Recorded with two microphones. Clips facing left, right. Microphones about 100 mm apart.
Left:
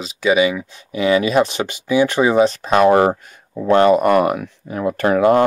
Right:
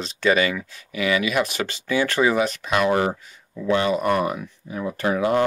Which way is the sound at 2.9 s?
50° left (ahead or behind).